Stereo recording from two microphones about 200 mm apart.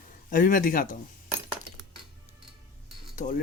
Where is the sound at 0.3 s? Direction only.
40° left (ahead or behind).